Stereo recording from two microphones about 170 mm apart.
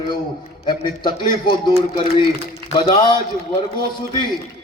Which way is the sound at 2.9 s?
25° left (ahead or behind).